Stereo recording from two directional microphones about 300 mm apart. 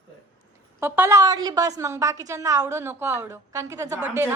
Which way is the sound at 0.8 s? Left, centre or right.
Centre.